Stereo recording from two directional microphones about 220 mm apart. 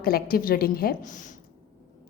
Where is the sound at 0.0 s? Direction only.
45° left (ahead or behind).